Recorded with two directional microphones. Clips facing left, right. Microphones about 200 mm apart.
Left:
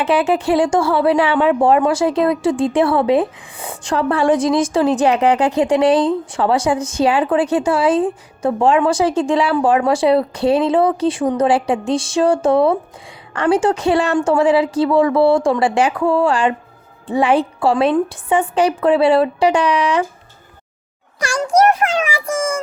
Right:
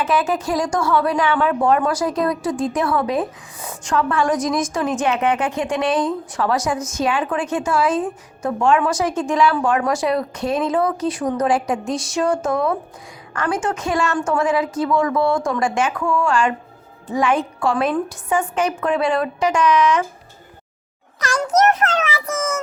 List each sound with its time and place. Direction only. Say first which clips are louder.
0.0 s speech: left 4 dB; 30° left (ahead or behind)
21.2 s a child's voice: left 3 dB; 10° left (ahead or behind)